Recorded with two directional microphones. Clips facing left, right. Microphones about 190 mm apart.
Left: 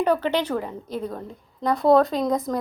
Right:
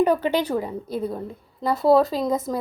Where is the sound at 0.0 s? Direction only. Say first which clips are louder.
Right 2 dB; 10° right (ahead or behind).